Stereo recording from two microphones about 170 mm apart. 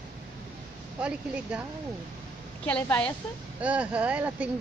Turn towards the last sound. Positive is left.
turn(degrees=-10)  # may be behind; listen again after turning